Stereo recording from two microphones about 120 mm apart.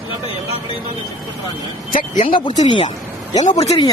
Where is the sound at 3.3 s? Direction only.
75° left (ahead or behind).